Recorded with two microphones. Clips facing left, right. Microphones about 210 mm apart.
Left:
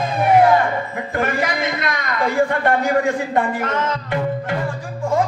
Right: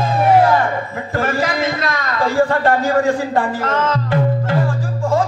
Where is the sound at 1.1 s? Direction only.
20° left (ahead or behind).